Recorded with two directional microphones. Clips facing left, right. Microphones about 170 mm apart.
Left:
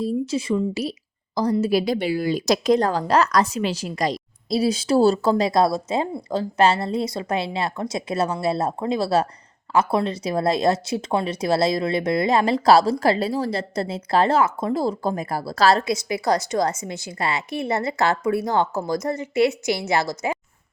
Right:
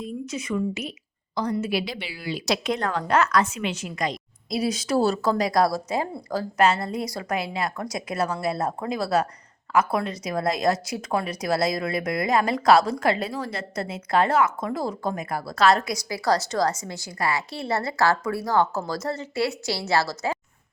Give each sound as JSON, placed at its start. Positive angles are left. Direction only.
{"t": 0.0, "sound": "a woman's voice", "side_deg": 30}